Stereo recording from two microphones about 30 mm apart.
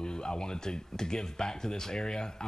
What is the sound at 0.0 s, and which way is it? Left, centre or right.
Speech, left.